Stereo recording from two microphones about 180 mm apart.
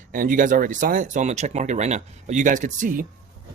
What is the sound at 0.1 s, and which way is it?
Speech, 50° right (ahead or behind).